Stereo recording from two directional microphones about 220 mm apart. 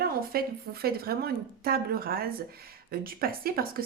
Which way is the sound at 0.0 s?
45° right (ahead or behind).